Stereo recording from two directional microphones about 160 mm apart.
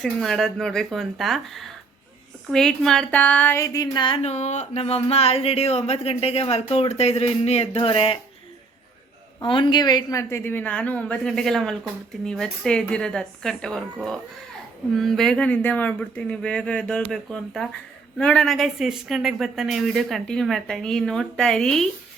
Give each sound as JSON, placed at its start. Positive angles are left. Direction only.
{"t": 0.0, "sound": "speech", "side_deg": 5}
{"t": 9.4, "sound": "a woman's voice", "side_deg": 30}